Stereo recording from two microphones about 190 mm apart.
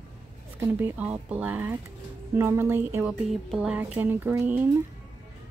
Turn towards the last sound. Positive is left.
turn(degrees=-10)  # may be behind; listen again after turning